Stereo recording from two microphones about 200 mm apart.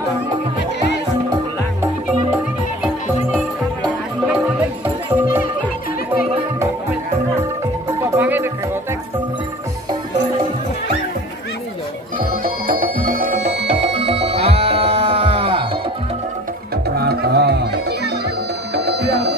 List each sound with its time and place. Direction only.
1.3 s music: 10° right (ahead or behind)
4.8 s music: 10° right (ahead or behind)
8.1 s music: 10° right (ahead or behind)
12.6 s music: 45° right (ahead or behind)
13.7 s music: 30° right (ahead or behind)
16.9 s music: 50° right (ahead or behind)
18.8 s music: 55° right (ahead or behind)